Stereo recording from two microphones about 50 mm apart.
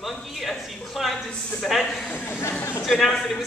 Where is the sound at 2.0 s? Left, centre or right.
Left.